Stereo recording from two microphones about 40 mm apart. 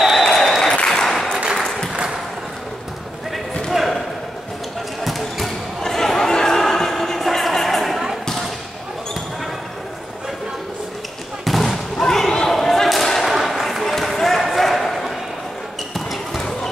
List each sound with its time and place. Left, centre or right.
0.0 s applause: centre
3.7 s basketball bounce: centre
5.0 s basketball bounce: centre
11.4 s a sound: centre
12.0 s basketball bounce: centre